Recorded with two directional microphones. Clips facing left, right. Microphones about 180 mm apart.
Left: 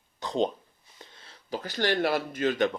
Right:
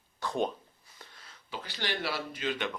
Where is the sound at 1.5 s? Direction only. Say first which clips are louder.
Left 9 dB; 45° left (ahead or behind).